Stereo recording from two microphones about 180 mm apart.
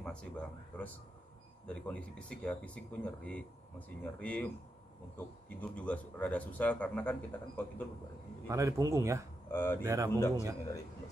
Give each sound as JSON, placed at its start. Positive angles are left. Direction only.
{"t": 0.0, "sound": "a man's voice", "side_deg": 5}
{"t": 8.5, "sound": "a man's voice", "side_deg": -15}
{"t": 9.5, "sound": "a man's voice", "side_deg": 10}
{"t": 9.8, "sound": "a man's voice", "side_deg": -20}
{"t": 10.1, "sound": "a man's voice", "side_deg": 15}